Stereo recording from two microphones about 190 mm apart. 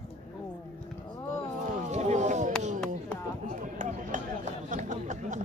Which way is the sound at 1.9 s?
35° right (ahead or behind).